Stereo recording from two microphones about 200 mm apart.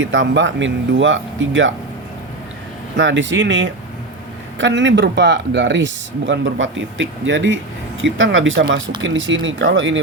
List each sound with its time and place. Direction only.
0.0 s speech: 65° right (ahead or behind)
3.0 s speech: 65° right (ahead or behind)